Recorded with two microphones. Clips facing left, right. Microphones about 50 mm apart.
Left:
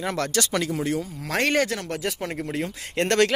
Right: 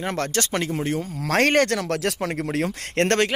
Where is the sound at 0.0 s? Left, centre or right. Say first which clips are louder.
Even; right.